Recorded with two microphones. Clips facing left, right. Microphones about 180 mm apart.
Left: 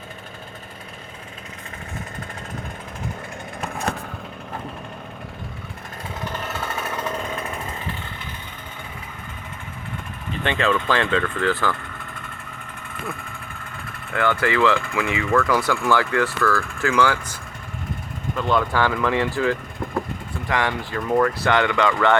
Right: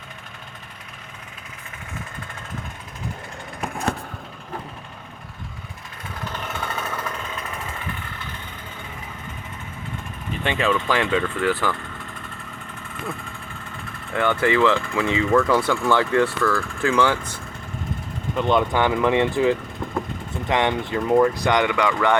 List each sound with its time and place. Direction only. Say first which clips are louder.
6.3 s chainsaw: right 1 dB; 5° left (ahead or behind)
10.4 s speech: left 1 dB; 10° right (ahead or behind)
14.1 s speech: right 1 dB; 20° right (ahead or behind)
18.3 s speech: right 1 dB; 20° right (ahead or behind)